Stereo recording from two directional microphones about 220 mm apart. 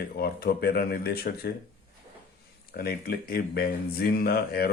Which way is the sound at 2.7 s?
45° left (ahead or behind).